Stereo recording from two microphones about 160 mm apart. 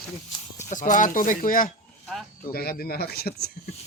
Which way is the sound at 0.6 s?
55° left (ahead or behind).